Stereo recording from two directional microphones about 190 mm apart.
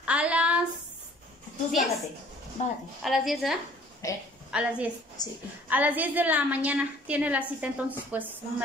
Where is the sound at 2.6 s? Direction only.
40° left (ahead or behind).